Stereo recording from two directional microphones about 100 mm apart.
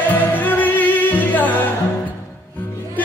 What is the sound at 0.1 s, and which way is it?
Music, 15° left (ahead or behind).